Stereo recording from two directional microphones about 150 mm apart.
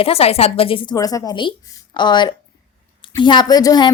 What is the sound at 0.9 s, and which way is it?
Speech, 25° left (ahead or behind).